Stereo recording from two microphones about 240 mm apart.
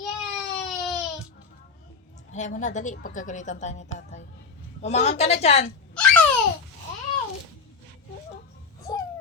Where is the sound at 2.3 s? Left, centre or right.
Left.